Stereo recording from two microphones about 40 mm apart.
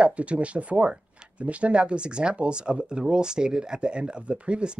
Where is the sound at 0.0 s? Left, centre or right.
Right.